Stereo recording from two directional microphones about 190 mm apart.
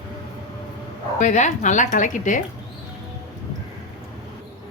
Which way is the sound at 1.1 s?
40° left (ahead or behind).